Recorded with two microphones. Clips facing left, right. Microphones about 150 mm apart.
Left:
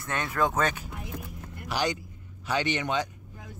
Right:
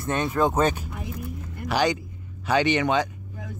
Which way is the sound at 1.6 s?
75° right (ahead or behind).